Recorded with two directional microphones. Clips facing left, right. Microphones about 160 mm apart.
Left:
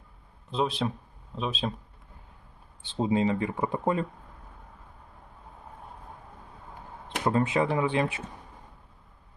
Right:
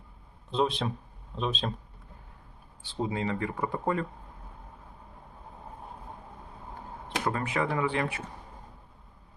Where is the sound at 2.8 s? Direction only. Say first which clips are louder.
Left 6 dB; 20° left (ahead or behind).